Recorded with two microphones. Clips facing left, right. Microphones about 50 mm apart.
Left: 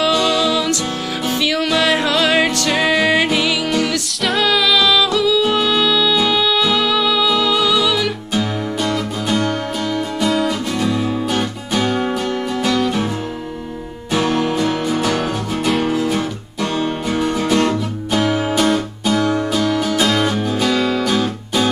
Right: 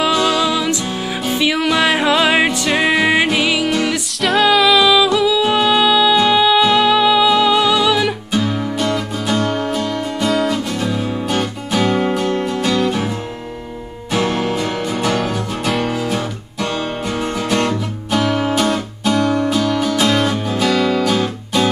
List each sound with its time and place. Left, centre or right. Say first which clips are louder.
0.0 s music: right 1 dB; centre
8.4 s music: right 1 dB; centre
12.7 s music: right 1 dB; centre
14.4 s music: left 2 dB; centre